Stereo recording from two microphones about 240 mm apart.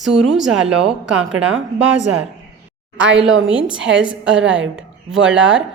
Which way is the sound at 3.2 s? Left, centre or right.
Right.